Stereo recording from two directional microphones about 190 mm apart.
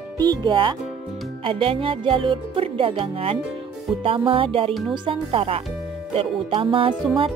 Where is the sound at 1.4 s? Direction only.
30° right (ahead or behind).